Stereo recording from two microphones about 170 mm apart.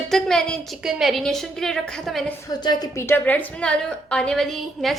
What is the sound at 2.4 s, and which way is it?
A woman's voice, 25° left (ahead or behind).